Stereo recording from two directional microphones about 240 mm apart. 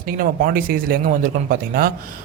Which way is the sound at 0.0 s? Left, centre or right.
Right.